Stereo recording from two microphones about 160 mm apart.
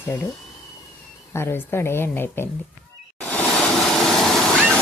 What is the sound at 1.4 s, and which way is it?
Speech, 15° left (ahead or behind).